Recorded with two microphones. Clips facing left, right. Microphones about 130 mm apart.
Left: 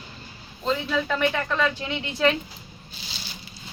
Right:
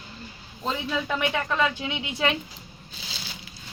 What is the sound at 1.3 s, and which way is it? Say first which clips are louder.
Speech: even; 10° right (ahead or behind).